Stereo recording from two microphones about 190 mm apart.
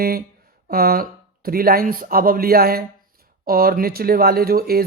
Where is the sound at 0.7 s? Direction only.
50° right (ahead or behind).